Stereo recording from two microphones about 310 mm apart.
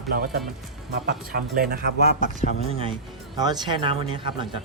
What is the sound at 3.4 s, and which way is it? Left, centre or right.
Speech, centre.